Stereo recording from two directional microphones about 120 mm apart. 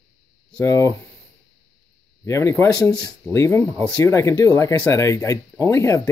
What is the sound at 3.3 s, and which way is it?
Speech, 20° left (ahead or behind).